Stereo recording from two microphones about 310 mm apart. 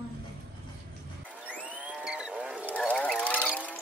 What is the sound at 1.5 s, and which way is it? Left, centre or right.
Wild animals, centre.